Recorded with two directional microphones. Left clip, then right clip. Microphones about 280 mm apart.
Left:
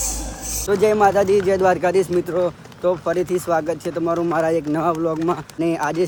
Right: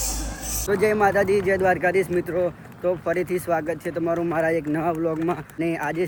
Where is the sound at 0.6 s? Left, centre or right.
Centre.